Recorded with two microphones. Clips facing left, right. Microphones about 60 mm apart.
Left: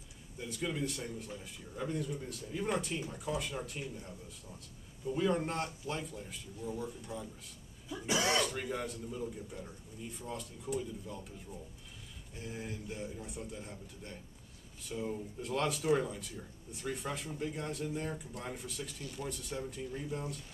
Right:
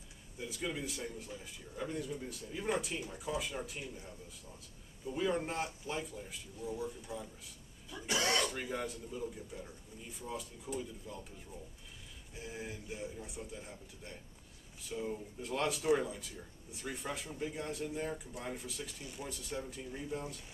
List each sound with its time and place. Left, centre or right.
0.4 s speech: centre
7.9 s speech: centre
8.4 s speech: centre